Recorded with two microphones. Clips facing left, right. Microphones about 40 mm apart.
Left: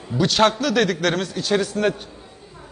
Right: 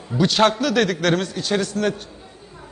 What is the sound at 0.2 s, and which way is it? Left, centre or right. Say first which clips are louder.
A man's voice: right 1 dB; centre.